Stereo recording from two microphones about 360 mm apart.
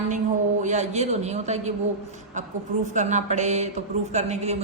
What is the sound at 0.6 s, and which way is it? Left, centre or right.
A man's voice, centre.